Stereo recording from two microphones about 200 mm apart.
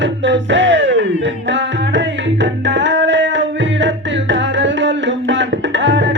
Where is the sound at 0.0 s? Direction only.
65° right (ahead or behind).